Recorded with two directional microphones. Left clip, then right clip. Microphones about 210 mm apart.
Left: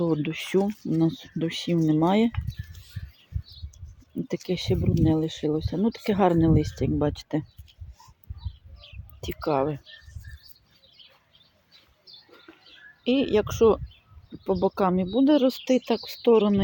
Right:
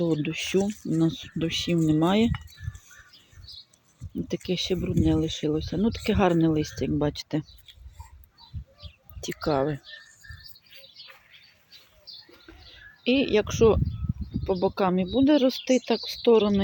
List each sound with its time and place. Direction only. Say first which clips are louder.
0.0 s speech: even; 5° left (ahead or behind)
0.6 s speech: left 1 dB; 15° left (ahead or behind)
4.0 s bird: right 2 dB; 15° left (ahead or behind)
4.4 s speech: even; 5° left (ahead or behind)
9.3 s speech: left 1 dB; centre (ahead or behind)
10.2 s bird: right 4 dB; 35° left (ahead or behind)
13.1 s speech: even; 5° left (ahead or behind)